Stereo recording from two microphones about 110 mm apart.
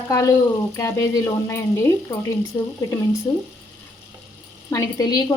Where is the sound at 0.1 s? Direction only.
30° left (ahead or behind).